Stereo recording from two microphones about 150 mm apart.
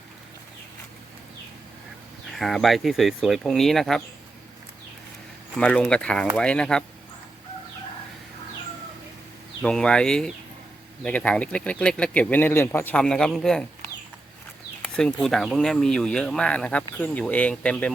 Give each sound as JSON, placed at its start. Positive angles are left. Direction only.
{"t": 2.3, "sound": "speech", "side_deg": 0}
{"t": 5.5, "sound": "speech", "side_deg": 10}
{"t": 9.6, "sound": "speech", "side_deg": 5}
{"t": 14.8, "sound": "speech", "side_deg": 5}